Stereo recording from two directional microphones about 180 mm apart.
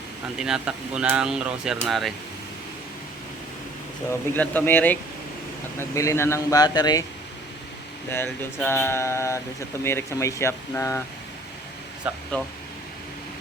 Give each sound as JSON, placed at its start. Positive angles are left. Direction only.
{"t": 0.3, "sound": "speech", "side_deg": -5}
{"t": 4.4, "sound": "speech", "side_deg": 10}
{"t": 8.1, "sound": "speech", "side_deg": 10}
{"t": 12.1, "sound": "speech", "side_deg": -10}